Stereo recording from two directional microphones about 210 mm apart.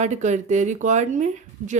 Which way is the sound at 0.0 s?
35° right (ahead or behind).